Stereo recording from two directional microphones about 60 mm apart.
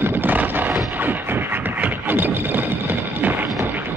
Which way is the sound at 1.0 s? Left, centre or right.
Right.